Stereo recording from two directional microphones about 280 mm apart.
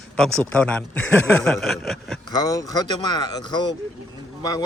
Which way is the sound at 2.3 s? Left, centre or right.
Centre.